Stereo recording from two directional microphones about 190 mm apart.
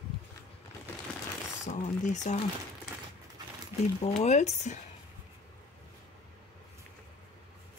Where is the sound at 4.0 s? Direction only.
35° left (ahead or behind).